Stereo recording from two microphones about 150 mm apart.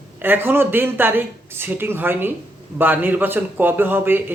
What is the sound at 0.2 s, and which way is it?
Speech, 15° right (ahead or behind).